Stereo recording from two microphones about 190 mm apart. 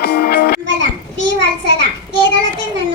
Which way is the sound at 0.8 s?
70° right (ahead or behind).